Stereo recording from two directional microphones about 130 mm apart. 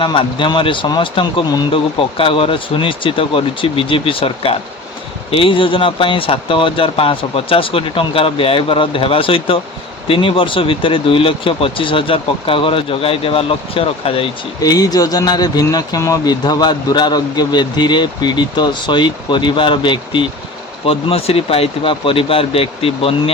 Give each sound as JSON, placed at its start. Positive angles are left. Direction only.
{"t": 0.0, "sound": "speech", "side_deg": 40}
{"t": 14.6, "sound": "speech", "side_deg": 30}